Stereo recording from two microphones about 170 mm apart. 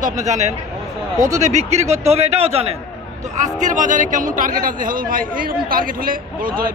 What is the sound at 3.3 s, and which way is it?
A man's voice, 45° right (ahead or behind).